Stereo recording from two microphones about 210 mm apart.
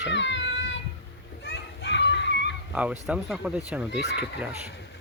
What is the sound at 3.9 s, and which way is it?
Speech, 55° left (ahead or behind).